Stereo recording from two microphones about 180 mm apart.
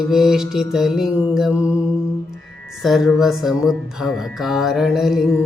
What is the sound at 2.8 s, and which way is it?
Music, centre (ahead or behind).